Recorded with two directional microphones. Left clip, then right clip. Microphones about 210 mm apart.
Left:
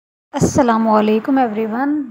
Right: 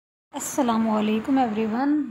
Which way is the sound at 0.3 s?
20° left (ahead or behind).